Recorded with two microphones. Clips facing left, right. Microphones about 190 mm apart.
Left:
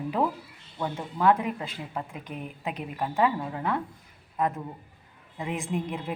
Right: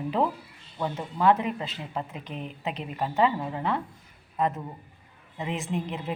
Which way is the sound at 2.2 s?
25° right (ahead or behind).